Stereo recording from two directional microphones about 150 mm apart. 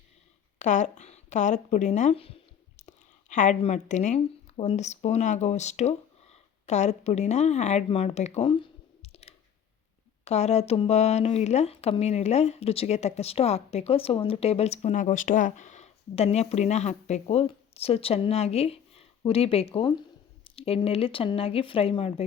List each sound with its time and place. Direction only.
0.6 s a sound: 55° left (ahead or behind)
3.6 s speech: 50° left (ahead or behind)
8.4 s clicking: 35° left (ahead or behind)
10.2 s speech: 45° left (ahead or behind)